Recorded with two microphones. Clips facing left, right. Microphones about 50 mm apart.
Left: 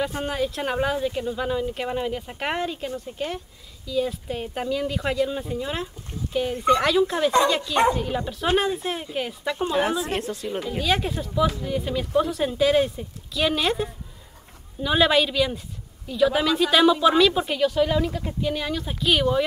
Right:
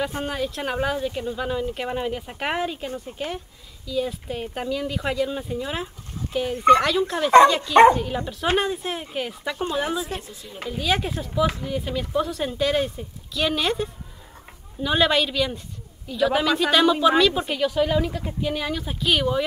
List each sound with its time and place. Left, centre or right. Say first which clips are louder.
0.2 s speech: left 1 dB; centre
10.0 s speech: left 6 dB; left
10.8 s speech: right 1 dB; centre